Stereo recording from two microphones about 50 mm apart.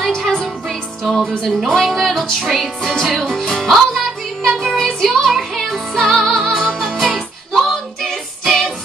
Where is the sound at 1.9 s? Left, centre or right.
Centre.